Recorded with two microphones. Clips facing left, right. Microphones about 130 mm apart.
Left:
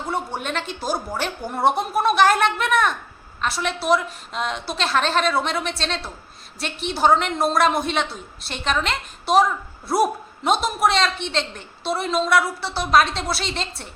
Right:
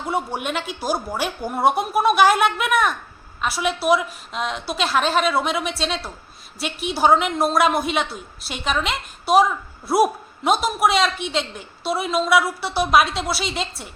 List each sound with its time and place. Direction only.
0.1 s a woman's voice: 10° right (ahead or behind)